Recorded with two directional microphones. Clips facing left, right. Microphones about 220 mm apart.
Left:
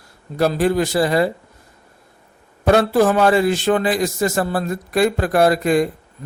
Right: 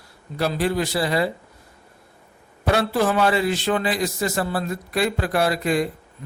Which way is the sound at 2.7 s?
45° left (ahead or behind).